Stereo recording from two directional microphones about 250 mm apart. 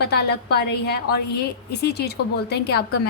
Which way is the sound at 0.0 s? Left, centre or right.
Left.